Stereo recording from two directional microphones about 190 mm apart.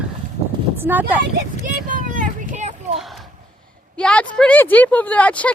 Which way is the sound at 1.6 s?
45° right (ahead or behind).